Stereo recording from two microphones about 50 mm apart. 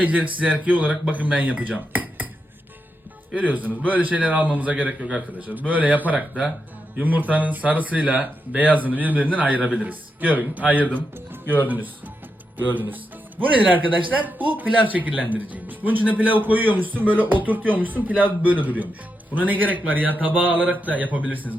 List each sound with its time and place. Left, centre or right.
0.0 s a man's voice: right
1.1 s cutlery: right
3.3 s a man's voice: right
11.4 s a man's voice: left
12.5 s a man's voice: right